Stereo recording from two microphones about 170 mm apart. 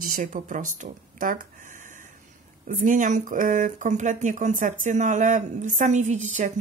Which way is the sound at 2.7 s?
50° right (ahead or behind).